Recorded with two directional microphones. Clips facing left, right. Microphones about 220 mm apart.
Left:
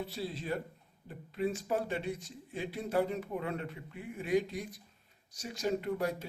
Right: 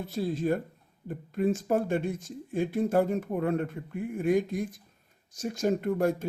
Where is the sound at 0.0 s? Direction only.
50° right (ahead or behind).